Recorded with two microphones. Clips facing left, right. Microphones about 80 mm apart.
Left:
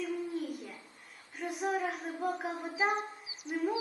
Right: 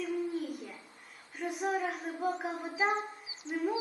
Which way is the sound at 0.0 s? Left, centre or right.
Centre.